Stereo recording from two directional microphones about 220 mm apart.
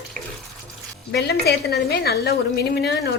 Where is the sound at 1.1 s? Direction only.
50° left (ahead or behind).